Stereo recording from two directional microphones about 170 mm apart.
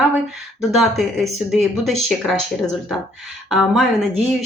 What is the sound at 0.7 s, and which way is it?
Speech, centre (ahead or behind).